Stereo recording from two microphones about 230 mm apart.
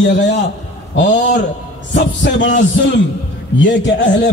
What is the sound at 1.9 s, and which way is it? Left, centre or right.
Speech, left.